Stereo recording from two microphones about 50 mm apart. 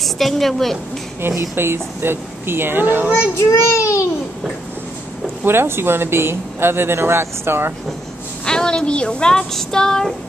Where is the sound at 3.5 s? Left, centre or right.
Left.